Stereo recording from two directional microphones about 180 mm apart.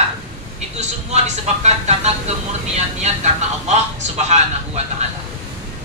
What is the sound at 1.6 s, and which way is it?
A man's voice, 40° right (ahead or behind).